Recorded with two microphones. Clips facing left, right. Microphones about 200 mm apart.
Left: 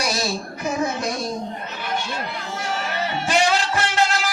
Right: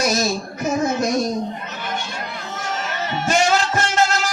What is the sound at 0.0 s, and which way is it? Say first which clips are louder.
Music: right 5 dB; 45° right (ahead or behind).